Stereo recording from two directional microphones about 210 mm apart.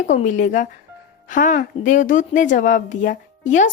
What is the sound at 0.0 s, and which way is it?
A woman's voice, 35° left (ahead or behind).